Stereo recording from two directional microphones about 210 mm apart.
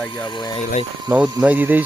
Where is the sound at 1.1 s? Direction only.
5° right (ahead or behind).